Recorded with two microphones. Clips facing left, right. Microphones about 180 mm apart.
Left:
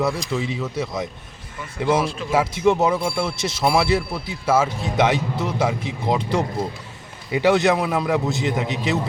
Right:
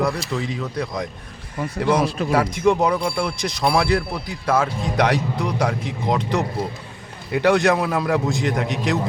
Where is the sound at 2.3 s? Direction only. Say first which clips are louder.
Left 1 dB; 5° left (ahead or behind).